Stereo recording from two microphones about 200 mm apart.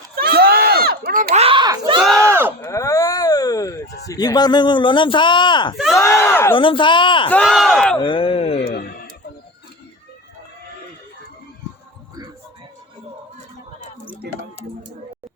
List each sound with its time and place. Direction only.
0.2 s crowd: 50° right (ahead or behind)
1.4 s a sound: 25° right (ahead or behind)
2.6 s a sound: 15° left (ahead or behind)
4.1 s speech: 20° left (ahead or behind)
5.7 s speech: centre (ahead or behind)
6.0 s speech: 15° left (ahead or behind)
6.6 s speech: 25° left (ahead or behind)
7.3 s speech: centre (ahead or behind)
7.9 s speech: 25° left (ahead or behind)